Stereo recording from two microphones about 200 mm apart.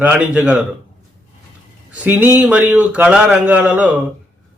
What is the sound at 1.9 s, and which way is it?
Speech, 10° right (ahead or behind).